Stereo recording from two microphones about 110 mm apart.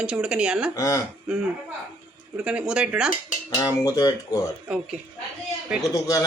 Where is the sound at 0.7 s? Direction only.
30° left (ahead or behind).